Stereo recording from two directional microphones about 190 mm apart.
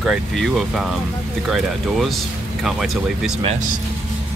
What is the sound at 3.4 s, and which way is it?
Speech, 35° right (ahead or behind).